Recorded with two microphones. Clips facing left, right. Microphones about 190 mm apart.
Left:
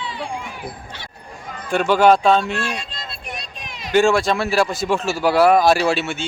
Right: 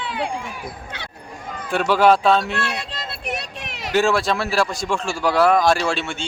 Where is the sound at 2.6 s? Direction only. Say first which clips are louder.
Even; 70° right (ahead or behind).